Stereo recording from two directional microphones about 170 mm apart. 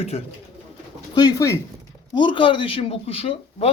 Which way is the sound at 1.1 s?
25° left (ahead or behind).